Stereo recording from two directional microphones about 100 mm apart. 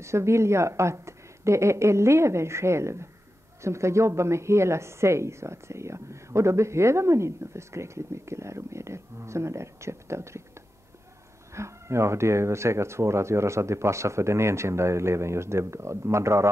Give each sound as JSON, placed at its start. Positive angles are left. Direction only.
{"t": 0.0, "sound": "a woman's voice", "side_deg": -30}
{"t": 11.5, "sound": "a woman's voice", "side_deg": -30}